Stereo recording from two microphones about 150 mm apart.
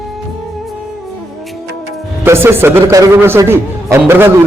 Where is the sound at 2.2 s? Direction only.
15° right (ahead or behind).